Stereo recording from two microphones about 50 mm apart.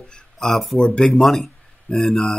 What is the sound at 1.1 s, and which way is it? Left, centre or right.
Speech, centre.